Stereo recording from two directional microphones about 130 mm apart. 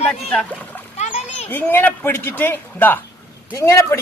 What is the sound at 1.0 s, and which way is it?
Splash, 55° left (ahead or behind).